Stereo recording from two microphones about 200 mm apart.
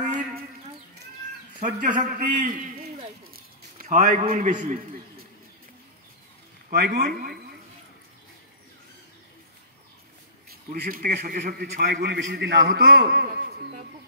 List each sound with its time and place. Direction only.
1.6 s a man's voice: 40° right (ahead or behind)
3.3 s a sound: 40° right (ahead or behind)
6.7 s a man's voice: 45° right (ahead or behind)
10.7 s a man's voice: 45° right (ahead or behind)